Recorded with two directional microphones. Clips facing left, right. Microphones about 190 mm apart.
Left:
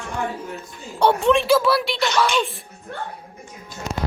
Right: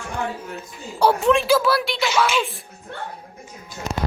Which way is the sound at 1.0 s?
Centre (ahead or behind).